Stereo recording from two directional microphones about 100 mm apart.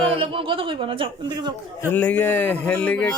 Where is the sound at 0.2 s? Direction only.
60° right (ahead or behind).